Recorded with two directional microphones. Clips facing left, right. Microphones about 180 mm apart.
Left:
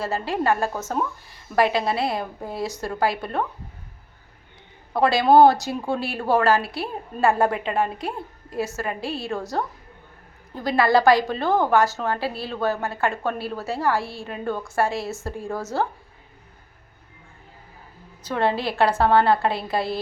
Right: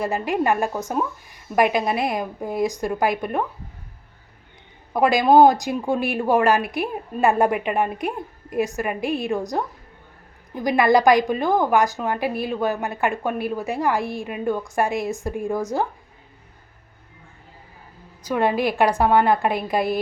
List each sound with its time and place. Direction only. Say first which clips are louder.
0.0 s a woman's voice: right 2 dB; 15° right (ahead or behind)
4.9 s a woman's voice: right 1 dB; 15° right (ahead or behind)
18.2 s a woman's voice: right 3 dB; 15° right (ahead or behind)